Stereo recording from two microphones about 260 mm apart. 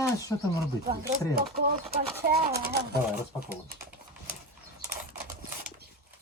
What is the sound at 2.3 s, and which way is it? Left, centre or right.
Speech, right.